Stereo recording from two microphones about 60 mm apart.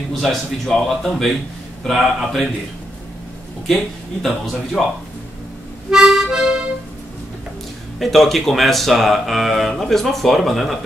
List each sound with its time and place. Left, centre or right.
0.1 s speech: centre
3.6 s speech: centre
5.9 s music: centre
8.0 s speech: centre